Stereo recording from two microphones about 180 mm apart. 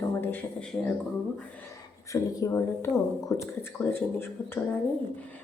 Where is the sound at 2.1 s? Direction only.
20° left (ahead or behind).